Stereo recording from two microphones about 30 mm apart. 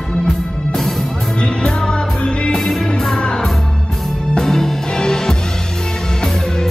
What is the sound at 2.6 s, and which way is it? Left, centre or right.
Music, centre.